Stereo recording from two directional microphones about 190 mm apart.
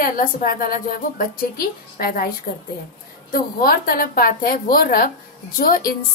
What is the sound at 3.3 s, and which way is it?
Speech, 50° left (ahead or behind).